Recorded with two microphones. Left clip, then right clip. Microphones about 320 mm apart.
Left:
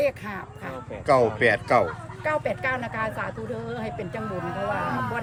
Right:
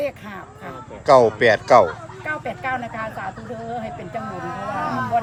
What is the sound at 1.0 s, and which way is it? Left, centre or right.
Speech, centre.